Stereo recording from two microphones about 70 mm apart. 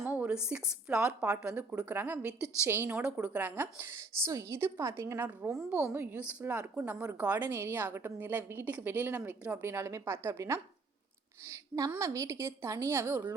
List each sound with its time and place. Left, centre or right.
0.2 s speech: centre
2.6 s a woman's voice: right
3.1 s a woman's voice: right
4.3 s a woman's voice: right
5.6 s a woman's voice: right
9.6 s a woman's voice: right